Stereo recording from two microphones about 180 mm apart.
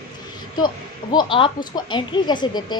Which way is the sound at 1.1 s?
25° left (ahead or behind).